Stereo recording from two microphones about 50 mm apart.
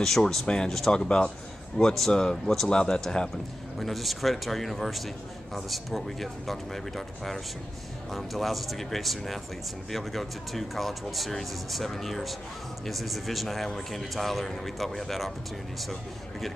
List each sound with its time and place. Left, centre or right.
0.0 s a man's voice: centre
1.0 s a man's voice: left
1.8 s a man's voice: centre
3.8 s a man's voice: centre